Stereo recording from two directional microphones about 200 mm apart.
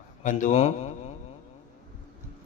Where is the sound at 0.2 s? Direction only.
40° left (ahead or behind).